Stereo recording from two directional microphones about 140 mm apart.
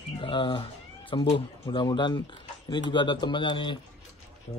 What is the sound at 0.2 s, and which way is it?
Speech, 35° left (ahead or behind).